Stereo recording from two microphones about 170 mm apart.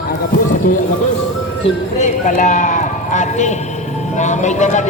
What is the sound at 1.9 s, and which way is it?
A man's voice, 45° left (ahead or behind).